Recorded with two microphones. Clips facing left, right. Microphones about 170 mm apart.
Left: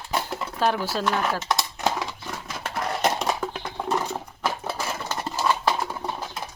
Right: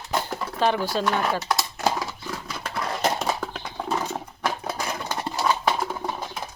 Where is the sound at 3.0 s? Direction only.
15° left (ahead or behind).